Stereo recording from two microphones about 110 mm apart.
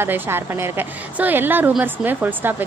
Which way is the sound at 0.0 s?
20° right (ahead or behind).